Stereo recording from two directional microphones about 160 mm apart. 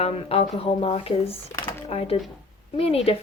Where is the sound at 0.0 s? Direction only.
35° left (ahead or behind).